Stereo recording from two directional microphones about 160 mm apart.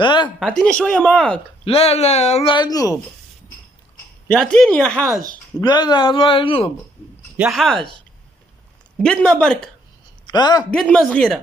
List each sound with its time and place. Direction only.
0.0 s speech: 30° left (ahead or behind)
0.4 s speech: 5° left (ahead or behind)
1.6 s speech: 40° left (ahead or behind)
2.5 s speech: 25° left (ahead or behind)
4.3 s speech: 5° left (ahead or behind)
5.6 s speech: 25° left (ahead or behind)
7.3 s speech: 5° right (ahead or behind)
7.6 s speech: 5° left (ahead or behind)
8.9 s speech: 5° left (ahead or behind)
10.2 s a man's voice: 25° left (ahead or behind)
10.7 s speech: 5° left (ahead or behind)